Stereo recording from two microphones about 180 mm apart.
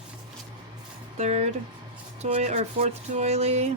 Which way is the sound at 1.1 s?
35° right (ahead or behind).